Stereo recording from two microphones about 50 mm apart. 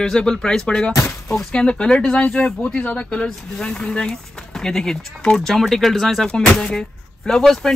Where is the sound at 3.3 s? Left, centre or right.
Centre.